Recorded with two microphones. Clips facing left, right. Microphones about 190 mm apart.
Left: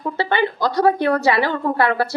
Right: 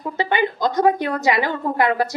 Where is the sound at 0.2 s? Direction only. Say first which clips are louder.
Even; 15° right (ahead or behind).